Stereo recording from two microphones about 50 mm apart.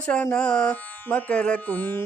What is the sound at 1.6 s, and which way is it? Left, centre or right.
Music, left.